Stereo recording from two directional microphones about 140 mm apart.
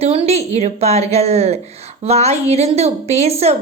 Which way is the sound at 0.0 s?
45° right (ahead or behind).